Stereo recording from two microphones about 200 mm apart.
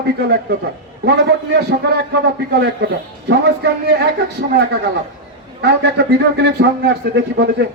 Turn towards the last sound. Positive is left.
turn(degrees=-55)  # may be behind; listen again after turning